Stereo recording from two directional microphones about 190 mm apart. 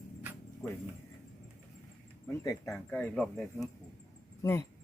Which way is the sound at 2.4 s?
15° left (ahead or behind).